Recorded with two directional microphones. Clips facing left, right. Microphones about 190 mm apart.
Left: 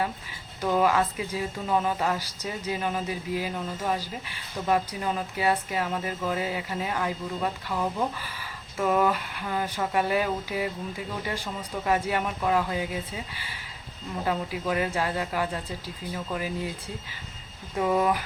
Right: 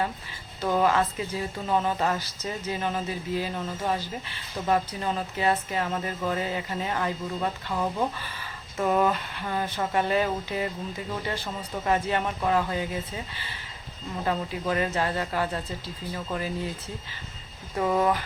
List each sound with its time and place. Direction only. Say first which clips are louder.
0.6 s speech: even; 10° left (ahead or behind)
8.8 s a sound: even; 5° left (ahead or behind)
9.1 s speech: even; 10° left (ahead or behind)
17.7 s speech: even; 10° left (ahead or behind)